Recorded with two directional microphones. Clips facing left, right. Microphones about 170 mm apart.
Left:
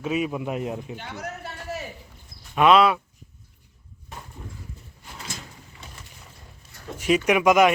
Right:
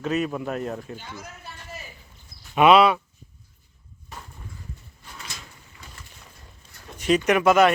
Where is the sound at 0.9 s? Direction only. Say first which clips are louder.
Left 5 dB; 65° left (ahead or behind).